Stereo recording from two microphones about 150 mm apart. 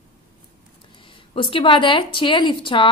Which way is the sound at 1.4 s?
35° left (ahead or behind).